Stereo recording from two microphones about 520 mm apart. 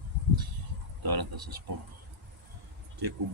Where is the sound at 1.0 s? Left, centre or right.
Right.